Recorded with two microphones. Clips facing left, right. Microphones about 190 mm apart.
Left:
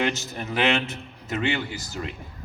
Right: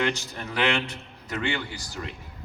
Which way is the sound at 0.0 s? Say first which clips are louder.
Left 1 dB; 20° left (ahead or behind).